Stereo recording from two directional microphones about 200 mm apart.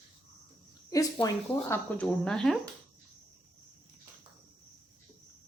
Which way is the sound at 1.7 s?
5° left (ahead or behind).